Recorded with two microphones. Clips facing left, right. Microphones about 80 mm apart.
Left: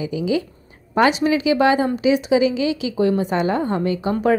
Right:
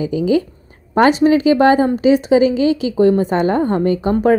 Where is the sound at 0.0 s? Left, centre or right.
Right.